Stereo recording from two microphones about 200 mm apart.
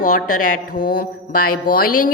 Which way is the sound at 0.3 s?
40° left (ahead or behind).